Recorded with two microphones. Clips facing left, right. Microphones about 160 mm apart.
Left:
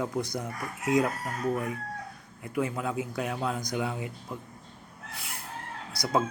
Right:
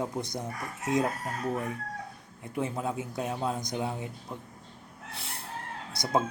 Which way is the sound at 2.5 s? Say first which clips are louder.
Left 2 dB; 30° right (ahead or behind).